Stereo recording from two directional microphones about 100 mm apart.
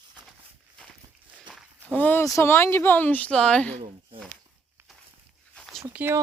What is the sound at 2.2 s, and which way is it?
Speech, 30° left (ahead or behind).